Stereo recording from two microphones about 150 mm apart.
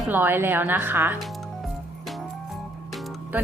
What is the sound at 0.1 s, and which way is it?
A woman's voice, 15° right (ahead or behind).